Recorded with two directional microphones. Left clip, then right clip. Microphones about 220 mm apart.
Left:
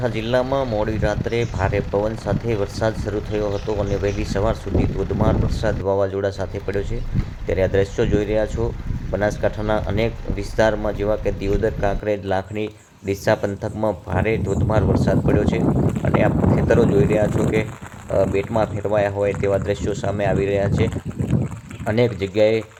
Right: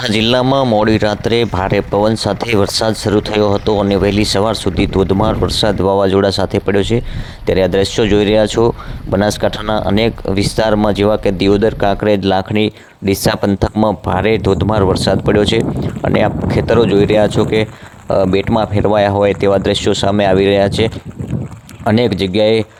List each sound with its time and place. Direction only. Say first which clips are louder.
0.0 s speech: right 7 dB; 35° right (ahead or behind)
16.0 s boat: right 8 dB; 40° right (ahead or behind)
16.5 s speech: right 7 dB; 35° right (ahead or behind)